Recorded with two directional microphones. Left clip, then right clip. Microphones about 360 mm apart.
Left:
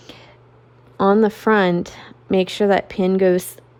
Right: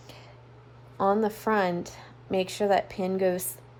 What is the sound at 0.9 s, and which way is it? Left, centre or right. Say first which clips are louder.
Speech: left 9 dB; left.